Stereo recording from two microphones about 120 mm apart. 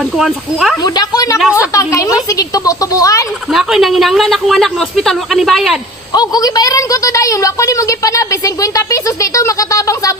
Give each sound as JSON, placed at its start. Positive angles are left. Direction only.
{"t": 0.2, "sound": "speech", "side_deg": 0}
{"t": 0.8, "sound": "a woman's voice", "side_deg": 35}
{"t": 3.5, "sound": "speech", "side_deg": 0}
{"t": 6.1, "sound": "a woman's voice", "side_deg": 30}